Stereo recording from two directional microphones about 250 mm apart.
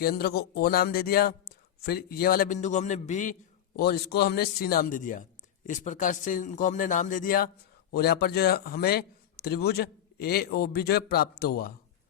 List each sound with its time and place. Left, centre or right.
0.0 s a man's voice: left
3.8 s a man's voice: left